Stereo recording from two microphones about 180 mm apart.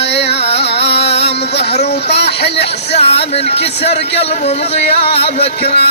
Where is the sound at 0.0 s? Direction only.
70° left (ahead or behind).